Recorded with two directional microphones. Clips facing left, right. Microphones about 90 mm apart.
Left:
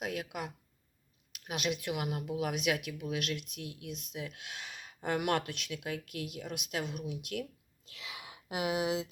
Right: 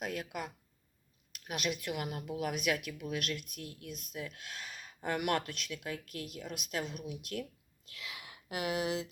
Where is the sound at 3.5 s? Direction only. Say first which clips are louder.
Left 2 dB; 45° right (ahead or behind).